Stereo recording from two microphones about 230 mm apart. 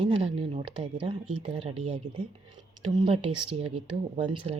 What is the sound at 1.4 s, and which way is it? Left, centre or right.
Speech, right.